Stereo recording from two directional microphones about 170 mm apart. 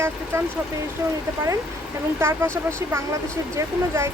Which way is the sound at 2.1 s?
15° right (ahead or behind).